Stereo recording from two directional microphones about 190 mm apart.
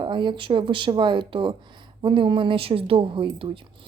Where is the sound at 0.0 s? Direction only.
25° right (ahead or behind).